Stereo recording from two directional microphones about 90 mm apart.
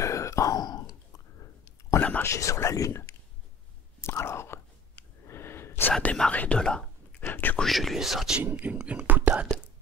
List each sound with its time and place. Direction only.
0.0 s a sound: 35° left (ahead or behind)
2.0 s speech: 15° left (ahead or behind)
2.2 s speech: 35° left (ahead or behind)
4.0 s whispering: 30° left (ahead or behind)
6.0 s speech: 15° left (ahead or behind)
7.2 s a sound: 25° left (ahead or behind)
7.5 s speech: centre (ahead or behind)
8.4 s speech: 15° right (ahead or behind)
9.0 s whispering: 20° right (ahead or behind)